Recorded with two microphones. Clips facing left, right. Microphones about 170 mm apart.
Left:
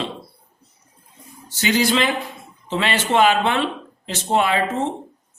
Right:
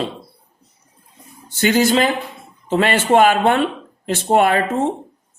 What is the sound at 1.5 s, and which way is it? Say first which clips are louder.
A man's voice: right 4 dB; 50° right (ahead or behind).